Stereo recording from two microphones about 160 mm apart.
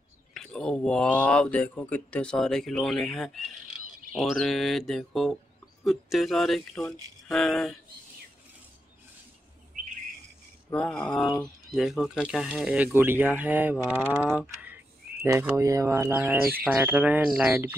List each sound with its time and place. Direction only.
0.3 s speech: 5° left (ahead or behind)
10.7 s mantra: 5° left (ahead or behind)
11.1 s speech: 5° left (ahead or behind); by 17.7 s 10° right (ahead or behind)